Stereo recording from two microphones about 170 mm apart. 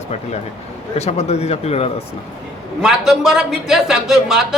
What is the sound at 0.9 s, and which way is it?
Speech, 40° left (ahead or behind).